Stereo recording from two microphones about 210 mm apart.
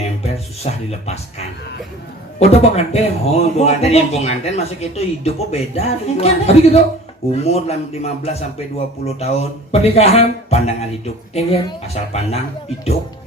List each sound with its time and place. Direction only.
0.2 s speech: 30° left (ahead or behind)
2.4 s a man's voice: 30° left (ahead or behind)